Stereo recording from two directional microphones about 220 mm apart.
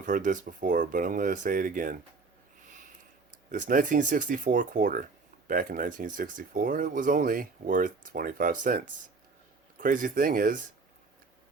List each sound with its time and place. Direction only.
0.0 s speech: 35° right (ahead or behind)
2.6 s a sound: 35° right (ahead or behind)
3.5 s speech: 40° right (ahead or behind)